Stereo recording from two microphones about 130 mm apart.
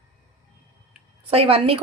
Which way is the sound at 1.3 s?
45° right (ahead or behind).